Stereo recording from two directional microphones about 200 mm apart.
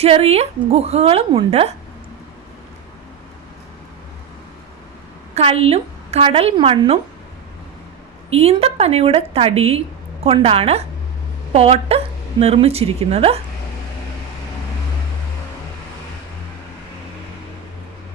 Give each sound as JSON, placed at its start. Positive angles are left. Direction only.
{"t": 0.0, "sound": "a woman's voice", "side_deg": -30}
{"t": 5.3, "sound": "a woman's voice", "side_deg": -30}
{"t": 8.3, "sound": "a woman's voice", "side_deg": -30}